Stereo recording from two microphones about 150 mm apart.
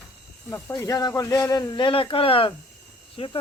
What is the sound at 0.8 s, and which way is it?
Speech, 20° left (ahead or behind).